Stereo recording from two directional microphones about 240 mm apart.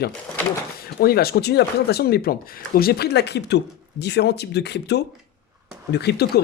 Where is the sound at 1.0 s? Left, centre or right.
Left.